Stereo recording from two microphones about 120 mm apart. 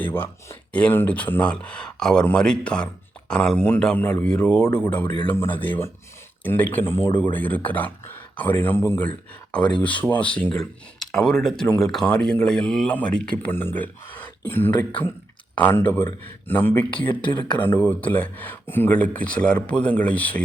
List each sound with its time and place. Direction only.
0.0 s speech: 15° left (ahead or behind)